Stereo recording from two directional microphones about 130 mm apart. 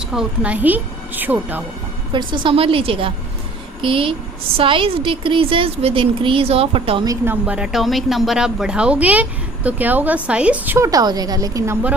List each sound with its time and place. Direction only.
0.1 s speech: 5° right (ahead or behind)
2.1 s a woman's voice: 40° right (ahead or behind)
7.3 s speech: 10° right (ahead or behind)
10.8 s a woman's voice: 25° right (ahead or behind)